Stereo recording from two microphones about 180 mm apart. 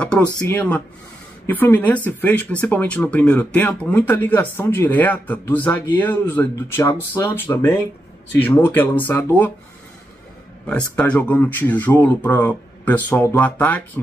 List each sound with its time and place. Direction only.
0.0 s speech: 5° left (ahead or behind)
6.9 s speech: 25° left (ahead or behind)
7.3 s speech: 15° left (ahead or behind)
11.0 s speech: 5° left (ahead or behind)